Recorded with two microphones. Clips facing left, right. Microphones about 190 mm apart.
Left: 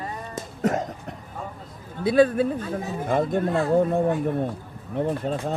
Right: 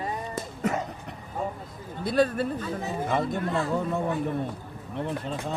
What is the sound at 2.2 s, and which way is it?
Speech, 50° left (ahead or behind).